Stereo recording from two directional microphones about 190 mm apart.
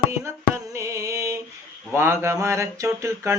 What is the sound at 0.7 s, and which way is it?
Music, 15° right (ahead or behind).